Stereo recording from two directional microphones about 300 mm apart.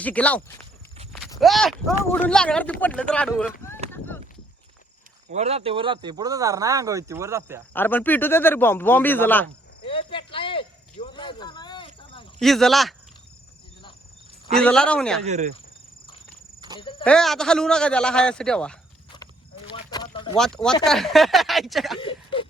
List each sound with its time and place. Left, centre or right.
0.0 s speech: centre
3.9 s a sound: centre
5.3 s speech: right
7.7 s speech: centre
9.8 s cricket: centre
12.4 s speech: centre
14.5 s speech: centre
15.3 s cricket: right
16.6 s cricket: centre
17.0 s speech: centre
19.7 s a sound: centre
20.3 s speech: centre
22.0 s a sound: centre